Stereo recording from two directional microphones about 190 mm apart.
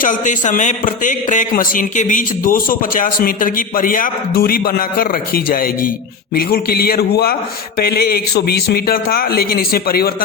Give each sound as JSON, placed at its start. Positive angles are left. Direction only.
{"t": 0.0, "sound": "a man's voice", "side_deg": 45}